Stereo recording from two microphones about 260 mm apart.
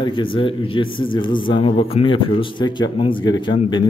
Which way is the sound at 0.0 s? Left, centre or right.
Centre.